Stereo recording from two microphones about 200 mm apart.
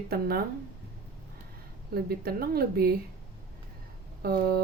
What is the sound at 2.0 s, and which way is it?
Speech, 50° right (ahead or behind).